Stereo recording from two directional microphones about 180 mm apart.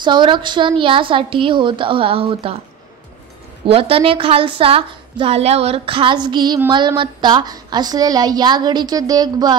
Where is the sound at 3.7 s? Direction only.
30° right (ahead or behind).